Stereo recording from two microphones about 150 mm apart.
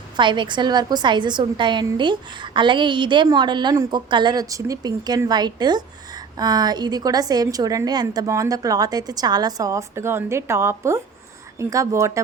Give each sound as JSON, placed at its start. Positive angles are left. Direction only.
{"t": 0.2, "sound": "a woman's voice", "side_deg": -30}